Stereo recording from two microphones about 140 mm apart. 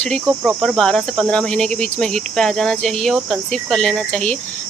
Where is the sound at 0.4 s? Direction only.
Centre (ahead or behind).